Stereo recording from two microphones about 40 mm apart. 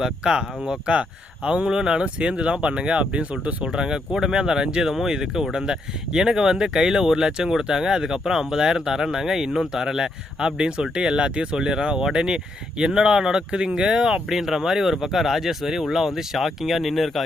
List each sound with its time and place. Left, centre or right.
0.0 s speech: centre; by 3.2 s right
3.7 s speech: centre